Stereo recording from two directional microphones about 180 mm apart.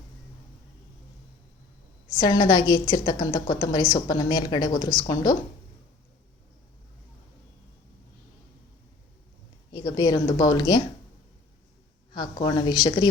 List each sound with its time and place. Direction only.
2.1 s a woman's voice: 20° left (ahead or behind)
9.7 s a woman's voice: 20° left (ahead or behind)
12.1 s a woman's voice: 25° left (ahead or behind)